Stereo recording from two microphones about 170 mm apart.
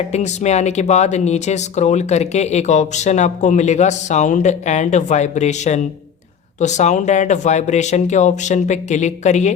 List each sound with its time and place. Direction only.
0.1 s speech: 40° left (ahead or behind)